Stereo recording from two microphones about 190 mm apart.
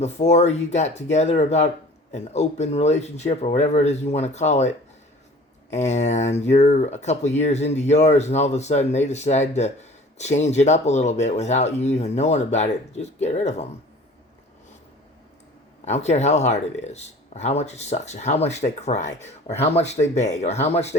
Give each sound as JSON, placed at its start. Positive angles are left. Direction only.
{"t": 0.0, "sound": "speech", "side_deg": 35}
{"t": 5.7, "sound": "speech", "side_deg": 35}
{"t": 15.8, "sound": "speech", "side_deg": 35}